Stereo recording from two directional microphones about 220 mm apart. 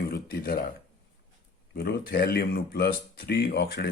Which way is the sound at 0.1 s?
45° left (ahead or behind).